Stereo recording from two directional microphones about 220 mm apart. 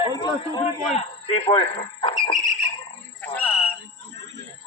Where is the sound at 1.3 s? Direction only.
25° left (ahead or behind).